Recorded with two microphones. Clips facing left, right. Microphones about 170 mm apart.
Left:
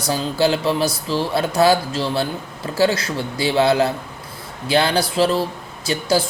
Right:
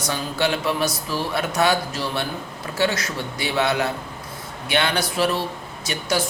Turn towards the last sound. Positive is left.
turn(degrees=30)  # may be behind; listen again after turning